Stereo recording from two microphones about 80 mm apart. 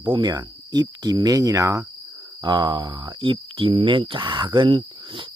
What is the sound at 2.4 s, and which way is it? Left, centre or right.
Speech, right.